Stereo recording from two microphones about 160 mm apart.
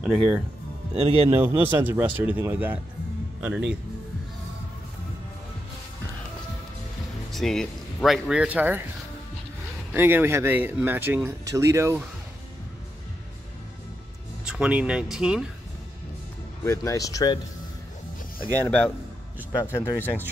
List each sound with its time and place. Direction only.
0.0 s speech: 5° right (ahead or behind)
0.9 s speech: 40° right (ahead or behind)
1.3 s speech: 15° right (ahead or behind)
7.3 s speech: centre (ahead or behind)
9.9 s speech: 15° right (ahead or behind)
14.4 s speech: 5° right (ahead or behind)
16.6 s speech: 20° left (ahead or behind)
19.6 s speech: 15° left (ahead or behind)